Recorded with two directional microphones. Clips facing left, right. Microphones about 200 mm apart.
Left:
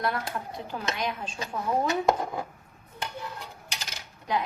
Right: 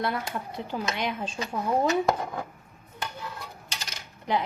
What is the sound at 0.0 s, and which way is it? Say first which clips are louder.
A woman's voice: even; 20° right (ahead or behind).